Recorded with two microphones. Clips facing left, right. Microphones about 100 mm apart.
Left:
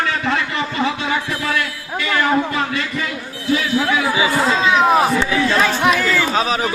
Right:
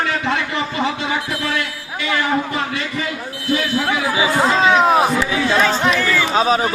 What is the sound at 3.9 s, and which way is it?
Speech, 25° right (ahead or behind).